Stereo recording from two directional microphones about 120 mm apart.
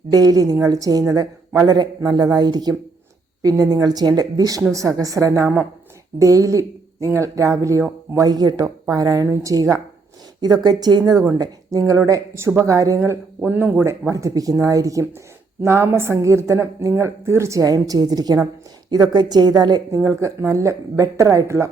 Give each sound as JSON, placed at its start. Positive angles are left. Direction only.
{"t": 0.1, "sound": "a woman's voice", "side_deg": -30}
{"t": 13.4, "sound": "a woman's voice", "side_deg": -15}